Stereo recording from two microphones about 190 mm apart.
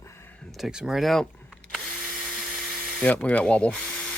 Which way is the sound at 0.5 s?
5° right (ahead or behind).